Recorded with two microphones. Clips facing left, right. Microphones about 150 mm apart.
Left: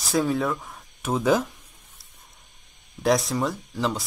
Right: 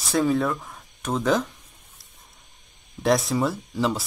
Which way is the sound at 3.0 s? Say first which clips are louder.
Right 1 dB; centre (ahead or behind).